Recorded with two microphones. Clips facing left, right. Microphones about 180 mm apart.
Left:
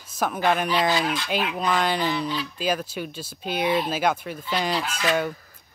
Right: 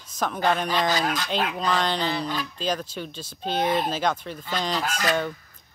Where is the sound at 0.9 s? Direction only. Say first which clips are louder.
Left 1 dB; 40° right (ahead or behind).